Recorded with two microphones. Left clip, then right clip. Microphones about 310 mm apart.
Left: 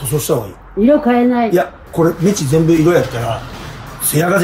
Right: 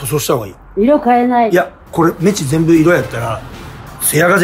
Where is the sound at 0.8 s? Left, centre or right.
Centre.